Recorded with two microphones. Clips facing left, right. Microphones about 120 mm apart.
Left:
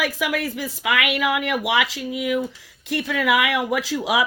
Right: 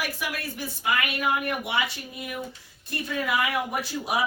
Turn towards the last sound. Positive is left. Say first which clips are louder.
# left 5 dB
turn(degrees=90)